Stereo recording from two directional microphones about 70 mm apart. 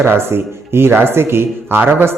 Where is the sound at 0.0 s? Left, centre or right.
Right.